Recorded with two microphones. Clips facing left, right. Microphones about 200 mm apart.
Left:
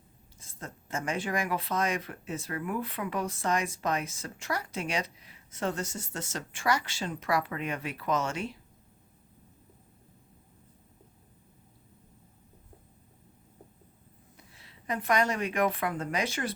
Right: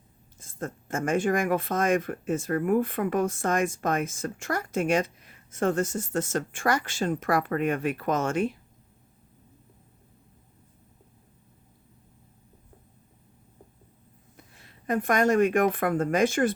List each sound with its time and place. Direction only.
0.3 s speech: 50° right (ahead or behind)
14.3 s speech: 50° right (ahead or behind)